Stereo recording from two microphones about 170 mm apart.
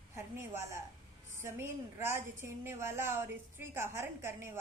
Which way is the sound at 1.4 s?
15° right (ahead or behind).